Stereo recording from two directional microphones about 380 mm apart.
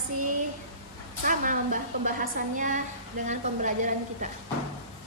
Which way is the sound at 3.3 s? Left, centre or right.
Centre.